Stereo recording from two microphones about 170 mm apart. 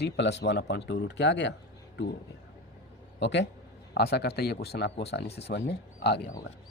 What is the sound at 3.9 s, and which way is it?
Speech, 70° left (ahead or behind).